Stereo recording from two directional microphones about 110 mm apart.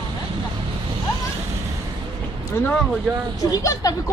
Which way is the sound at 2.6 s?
25° left (ahead or behind).